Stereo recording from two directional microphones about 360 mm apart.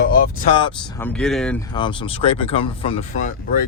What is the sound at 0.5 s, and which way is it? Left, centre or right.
Speech, centre.